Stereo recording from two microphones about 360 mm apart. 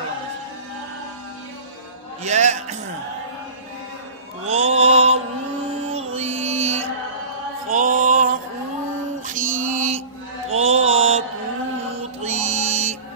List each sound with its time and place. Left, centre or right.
2.2 s a man's voice: centre
4.5 s mantra: centre
6.1 s music: centre
10.5 s mantra: centre
12.2 s music: centre